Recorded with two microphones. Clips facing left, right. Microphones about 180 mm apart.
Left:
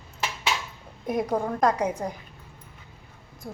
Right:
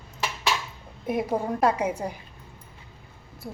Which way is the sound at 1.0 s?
5° right (ahead or behind).